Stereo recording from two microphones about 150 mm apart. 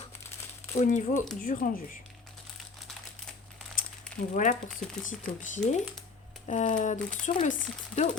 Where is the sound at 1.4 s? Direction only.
70° left (ahead or behind).